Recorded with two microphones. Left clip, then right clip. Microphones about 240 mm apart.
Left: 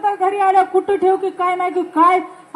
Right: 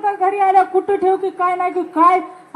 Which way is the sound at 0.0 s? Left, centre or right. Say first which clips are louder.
Even; left.